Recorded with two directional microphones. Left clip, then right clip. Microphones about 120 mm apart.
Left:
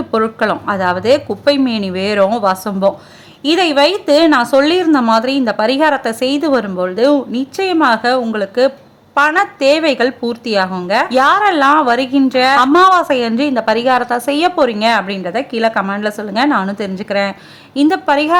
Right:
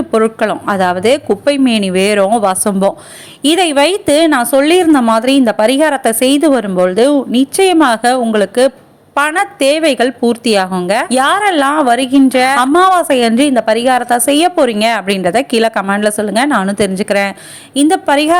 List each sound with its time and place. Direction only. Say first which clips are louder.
0.1 s a woman's voice: right 2 dB; 30° right (ahead or behind)
14.7 s speech: right 1 dB; 35° right (ahead or behind)
17.7 s a woman's voice: right 2 dB; 20° right (ahead or behind)